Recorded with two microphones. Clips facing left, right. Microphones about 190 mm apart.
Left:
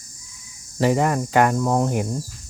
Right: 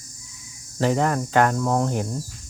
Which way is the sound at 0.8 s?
10° left (ahead or behind).